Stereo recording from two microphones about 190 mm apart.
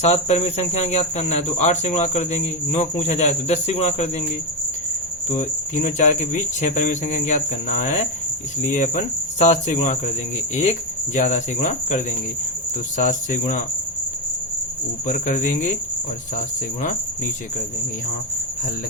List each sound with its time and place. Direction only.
0.0 s speech: 35° left (ahead or behind)
5.3 s speech: 40° left (ahead or behind)
8.6 s speech: 40° left (ahead or behind)
13.1 s speech: 40° left (ahead or behind)
15.0 s speech: 40° left (ahead or behind)